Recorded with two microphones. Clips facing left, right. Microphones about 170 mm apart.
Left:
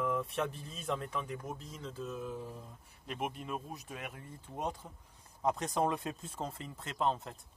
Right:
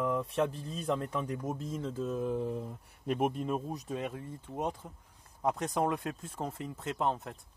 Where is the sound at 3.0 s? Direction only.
45° right (ahead or behind); by 4.9 s 20° right (ahead or behind).